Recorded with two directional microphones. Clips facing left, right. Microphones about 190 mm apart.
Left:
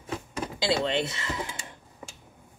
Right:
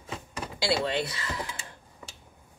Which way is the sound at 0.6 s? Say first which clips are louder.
Left 1 dB; 20° left (ahead or behind).